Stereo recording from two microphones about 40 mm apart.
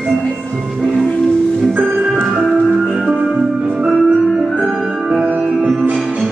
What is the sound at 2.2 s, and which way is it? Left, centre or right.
Music, centre.